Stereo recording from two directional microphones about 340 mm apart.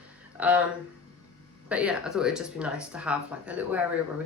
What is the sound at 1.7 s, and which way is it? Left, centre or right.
Speech, centre.